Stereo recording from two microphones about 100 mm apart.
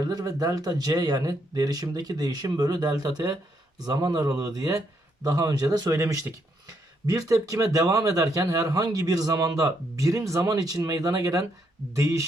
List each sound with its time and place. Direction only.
0.0 s speech: 40° right (ahead or behind)